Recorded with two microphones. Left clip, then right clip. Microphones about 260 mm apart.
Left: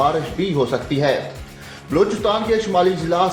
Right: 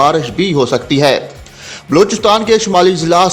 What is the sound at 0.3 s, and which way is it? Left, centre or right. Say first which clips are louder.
A man's voice: right 7 dB; right.